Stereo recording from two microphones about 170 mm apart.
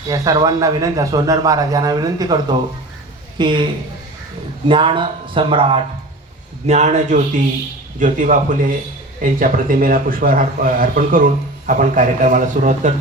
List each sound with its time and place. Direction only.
0.1 s a man's voice: 25° right (ahead or behind)
4.7 s speech: 30° right (ahead or behind)
6.7 s speech: 45° right (ahead or behind)